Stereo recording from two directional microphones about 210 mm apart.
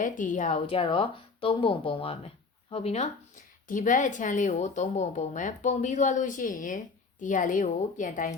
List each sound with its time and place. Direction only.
0.0 s speech: 40° left (ahead or behind)
0.8 s speech: 25° left (ahead or behind)